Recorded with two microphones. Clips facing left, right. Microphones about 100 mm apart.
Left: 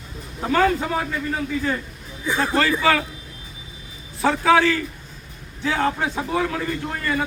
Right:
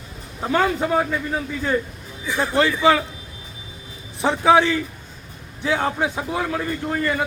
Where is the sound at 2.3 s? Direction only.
20° right (ahead or behind).